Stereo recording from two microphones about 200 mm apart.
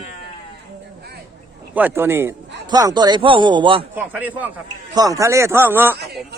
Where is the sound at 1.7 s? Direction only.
10° right (ahead or behind); by 3.8 s 25° right (ahead or behind).